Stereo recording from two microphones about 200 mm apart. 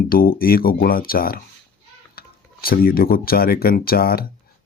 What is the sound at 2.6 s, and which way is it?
Speech, 50° left (ahead or behind).